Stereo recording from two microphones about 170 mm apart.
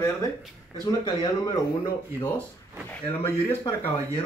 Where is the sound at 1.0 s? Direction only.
25° left (ahead or behind).